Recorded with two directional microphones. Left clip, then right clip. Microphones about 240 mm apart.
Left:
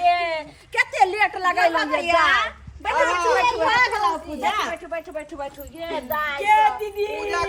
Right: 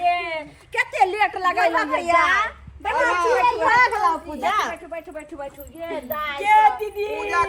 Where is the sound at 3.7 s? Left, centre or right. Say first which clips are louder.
Right 2 dB; centre.